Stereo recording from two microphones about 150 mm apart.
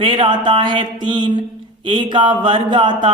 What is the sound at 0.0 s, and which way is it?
A man's voice, 30° right (ahead or behind).